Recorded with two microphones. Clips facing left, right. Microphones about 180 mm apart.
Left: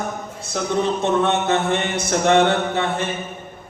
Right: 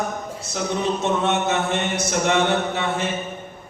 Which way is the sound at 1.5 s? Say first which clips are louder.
Left 2 dB; 60° left (ahead or behind).